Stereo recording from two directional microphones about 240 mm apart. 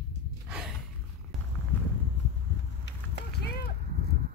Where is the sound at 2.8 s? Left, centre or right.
Left.